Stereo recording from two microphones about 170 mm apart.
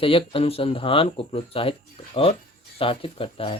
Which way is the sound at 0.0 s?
30° left (ahead or behind).